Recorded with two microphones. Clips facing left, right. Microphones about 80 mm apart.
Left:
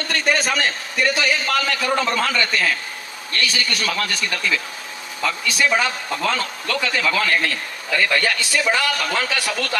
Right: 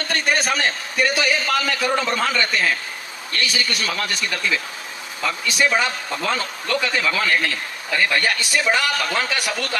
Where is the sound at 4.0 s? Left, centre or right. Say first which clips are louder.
Left 1 dB; right.